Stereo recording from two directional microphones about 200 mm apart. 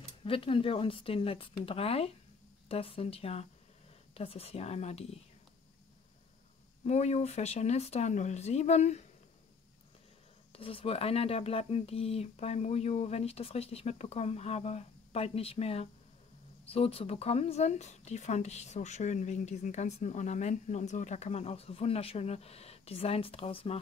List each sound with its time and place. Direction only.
0.2 s speech: 25° left (ahead or behind)
6.8 s speech: 35° left (ahead or behind)
10.5 s speech: 25° left (ahead or behind)